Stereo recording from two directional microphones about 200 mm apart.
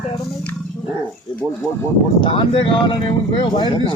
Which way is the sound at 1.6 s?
5° left (ahead or behind).